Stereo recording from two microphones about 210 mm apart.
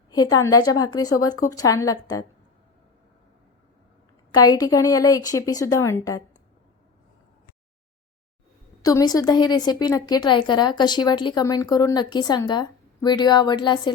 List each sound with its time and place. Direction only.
0.1 s a woman's voice: 20° left (ahead or behind)
4.3 s a woman's voice: 20° left (ahead or behind)
8.8 s a woman's voice: 15° left (ahead or behind)